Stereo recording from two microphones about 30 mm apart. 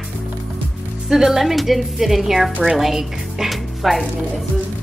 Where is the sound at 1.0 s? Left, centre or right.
Centre.